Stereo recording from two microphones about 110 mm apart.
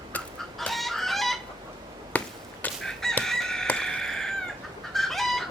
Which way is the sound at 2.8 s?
5° left (ahead or behind).